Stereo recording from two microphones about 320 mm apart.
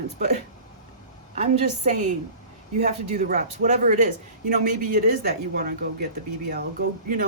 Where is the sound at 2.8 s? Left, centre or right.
Right.